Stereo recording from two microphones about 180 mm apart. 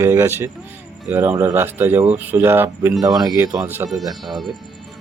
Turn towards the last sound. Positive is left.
turn(degrees=0)  # may be behind; listen again after turning